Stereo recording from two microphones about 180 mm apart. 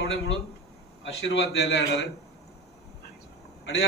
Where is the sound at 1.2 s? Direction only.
80° left.